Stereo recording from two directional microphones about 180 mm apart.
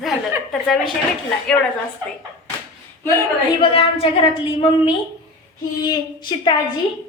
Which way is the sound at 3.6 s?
30° left (ahead or behind).